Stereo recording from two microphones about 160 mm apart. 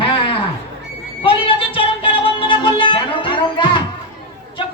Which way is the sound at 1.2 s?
35° left (ahead or behind).